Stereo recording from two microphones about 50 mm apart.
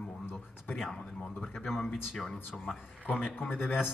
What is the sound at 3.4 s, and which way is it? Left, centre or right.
Speech, left.